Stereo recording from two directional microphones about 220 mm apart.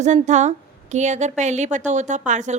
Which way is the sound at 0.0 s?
30° right (ahead or behind).